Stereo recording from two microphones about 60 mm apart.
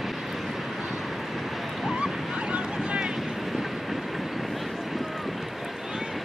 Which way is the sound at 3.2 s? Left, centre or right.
Centre.